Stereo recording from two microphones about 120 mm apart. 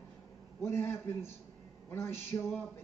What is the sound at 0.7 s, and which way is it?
Speech, 20° left (ahead or behind).